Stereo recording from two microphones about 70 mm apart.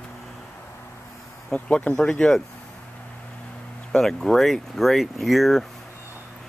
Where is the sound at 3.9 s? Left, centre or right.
Centre.